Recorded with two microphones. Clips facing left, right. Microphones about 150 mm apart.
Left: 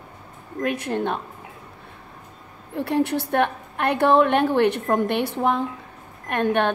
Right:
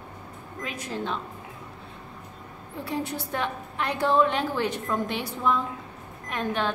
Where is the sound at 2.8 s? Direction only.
65° left (ahead or behind).